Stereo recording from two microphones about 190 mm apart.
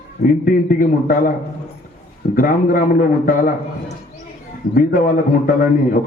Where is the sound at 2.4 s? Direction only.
45° left (ahead or behind).